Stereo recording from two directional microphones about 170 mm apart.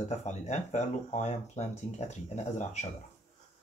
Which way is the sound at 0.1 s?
40° left (ahead or behind).